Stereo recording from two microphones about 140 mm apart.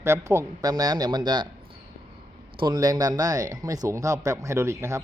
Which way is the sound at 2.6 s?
30° right (ahead or behind).